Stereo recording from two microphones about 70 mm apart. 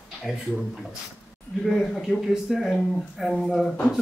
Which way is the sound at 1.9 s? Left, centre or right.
Centre.